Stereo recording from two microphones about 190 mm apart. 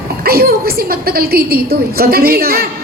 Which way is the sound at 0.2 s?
55° right (ahead or behind).